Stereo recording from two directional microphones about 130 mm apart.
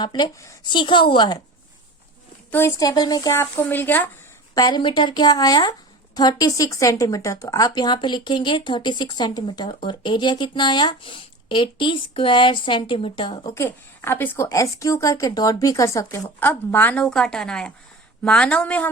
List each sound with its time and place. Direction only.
0.0 s speech: 35° left (ahead or behind)
0.3 s a woman's voice: 25° left (ahead or behind)
0.7 s speech: 40° left (ahead or behind)
2.5 s a woman's voice: 20° left (ahead or behind)
4.5 s speech: 30° left (ahead or behind)
13.5 s a woman's voice: 20° left (ahead or behind)